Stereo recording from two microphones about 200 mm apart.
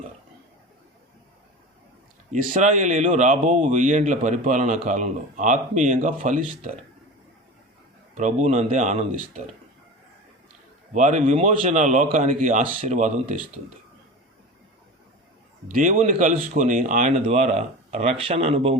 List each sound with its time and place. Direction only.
2.3 s speech: 40° right (ahead or behind)
8.1 s speech: 35° right (ahead or behind)
10.9 s speech: 40° right (ahead or behind)
15.8 s speech: 40° right (ahead or behind)